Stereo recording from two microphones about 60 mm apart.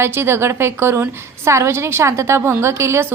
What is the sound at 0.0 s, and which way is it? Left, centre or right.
A woman's voice, right.